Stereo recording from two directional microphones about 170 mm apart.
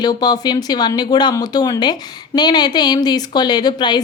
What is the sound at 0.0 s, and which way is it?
Speech, 25° left (ahead or behind).